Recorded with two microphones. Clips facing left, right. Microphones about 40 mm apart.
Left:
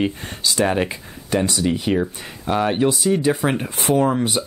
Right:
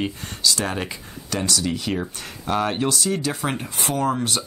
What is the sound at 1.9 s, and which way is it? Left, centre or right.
Speech, centre.